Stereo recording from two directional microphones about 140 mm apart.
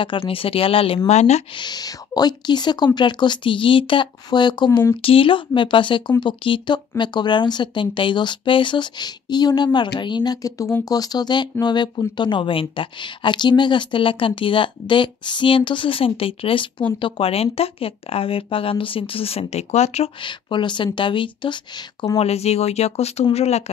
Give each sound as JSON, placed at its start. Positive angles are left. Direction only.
{"t": 0.0, "sound": "a woman's voice", "side_deg": 40}
{"t": 1.5, "sound": "a woman's voice", "side_deg": 30}
{"t": 20.2, "sound": "a woman's voice", "side_deg": 35}
{"t": 22.2, "sound": "speech", "side_deg": 50}